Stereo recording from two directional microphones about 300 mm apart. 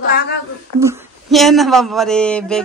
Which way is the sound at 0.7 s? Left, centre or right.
Centre.